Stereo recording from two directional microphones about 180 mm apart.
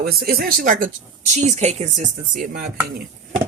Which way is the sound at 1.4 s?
35° right (ahead or behind).